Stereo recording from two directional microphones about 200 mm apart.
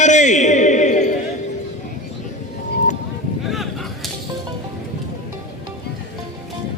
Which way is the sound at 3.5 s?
Centre (ahead or behind).